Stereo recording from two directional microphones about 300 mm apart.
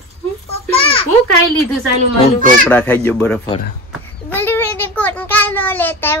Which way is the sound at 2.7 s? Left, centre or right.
Centre.